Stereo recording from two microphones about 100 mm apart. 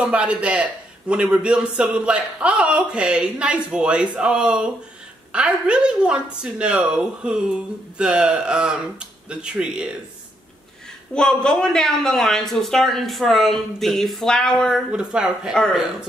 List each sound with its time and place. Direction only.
0.0 s a man's voice: 10° right (ahead or behind)
11.1 s speech: 5° left (ahead or behind)
14.9 s a man's voice: 10° right (ahead or behind)